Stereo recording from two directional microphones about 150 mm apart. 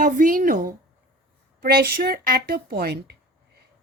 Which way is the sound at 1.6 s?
90° right.